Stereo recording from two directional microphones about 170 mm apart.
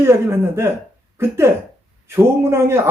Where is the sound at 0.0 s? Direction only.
15° right (ahead or behind).